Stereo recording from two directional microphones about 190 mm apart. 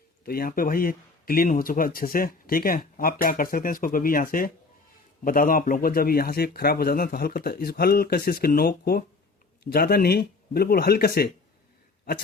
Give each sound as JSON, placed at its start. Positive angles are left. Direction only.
{"t": 0.3, "sound": "speech", "side_deg": 50}